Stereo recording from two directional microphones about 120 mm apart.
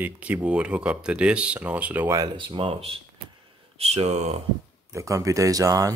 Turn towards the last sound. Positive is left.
turn(degrees=-30)  # may be behind; listen again after turning